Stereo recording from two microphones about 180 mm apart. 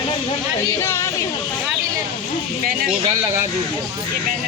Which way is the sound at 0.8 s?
15° left (ahead or behind).